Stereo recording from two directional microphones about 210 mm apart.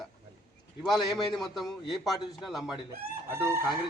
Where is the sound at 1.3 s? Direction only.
Centre (ahead or behind).